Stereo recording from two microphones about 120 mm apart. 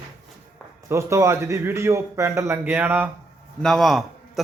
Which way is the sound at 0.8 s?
25° right (ahead or behind).